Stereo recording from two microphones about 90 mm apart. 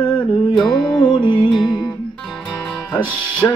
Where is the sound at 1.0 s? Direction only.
65° left (ahead or behind).